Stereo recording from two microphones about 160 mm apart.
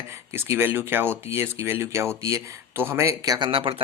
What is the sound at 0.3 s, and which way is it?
A man's voice, 15° right (ahead or behind).